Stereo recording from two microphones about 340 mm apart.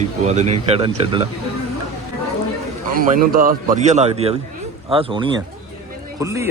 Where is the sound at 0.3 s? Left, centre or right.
Centre.